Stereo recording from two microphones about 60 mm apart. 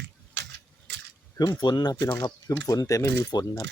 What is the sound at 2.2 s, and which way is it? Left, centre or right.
Speech, left.